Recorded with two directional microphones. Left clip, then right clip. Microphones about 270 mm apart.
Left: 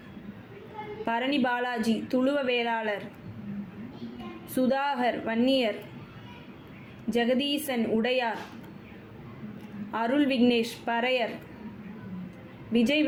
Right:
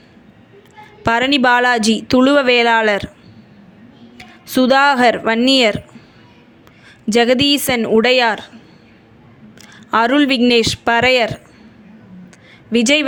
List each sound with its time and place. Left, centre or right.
1.0 s speech: right
4.5 s speech: right
7.1 s speech: right
9.9 s speech: right
12.7 s speech: right